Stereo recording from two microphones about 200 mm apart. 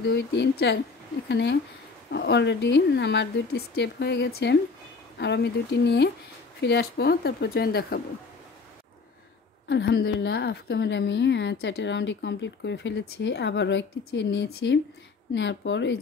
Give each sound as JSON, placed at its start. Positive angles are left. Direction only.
{"t": 0.1, "sound": "a woman's voice", "side_deg": 55}
{"t": 9.7, "sound": "a woman's voice", "side_deg": 60}